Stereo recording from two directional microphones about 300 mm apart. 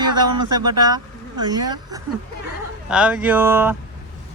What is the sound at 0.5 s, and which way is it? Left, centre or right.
Speech, centre.